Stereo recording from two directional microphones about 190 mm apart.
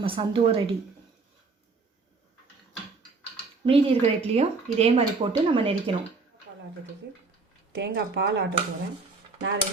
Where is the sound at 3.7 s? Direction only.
30° right (ahead or behind).